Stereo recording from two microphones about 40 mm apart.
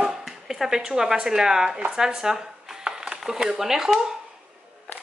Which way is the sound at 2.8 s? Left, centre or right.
Centre.